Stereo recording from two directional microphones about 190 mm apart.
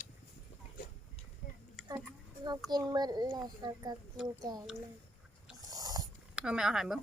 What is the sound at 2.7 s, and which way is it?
A child's voice, 20° right (ahead or behind).